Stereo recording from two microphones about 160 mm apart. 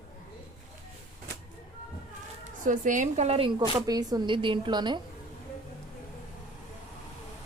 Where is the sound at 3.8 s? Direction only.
25° right (ahead or behind).